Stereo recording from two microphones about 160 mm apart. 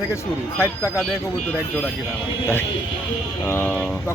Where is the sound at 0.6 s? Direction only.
15° left (ahead or behind).